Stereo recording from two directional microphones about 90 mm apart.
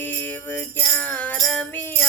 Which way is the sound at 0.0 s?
20° left (ahead or behind).